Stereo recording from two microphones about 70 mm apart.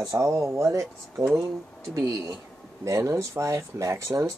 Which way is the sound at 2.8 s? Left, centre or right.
Right.